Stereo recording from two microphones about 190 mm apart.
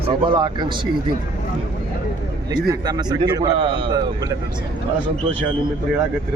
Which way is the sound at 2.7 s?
20° right (ahead or behind).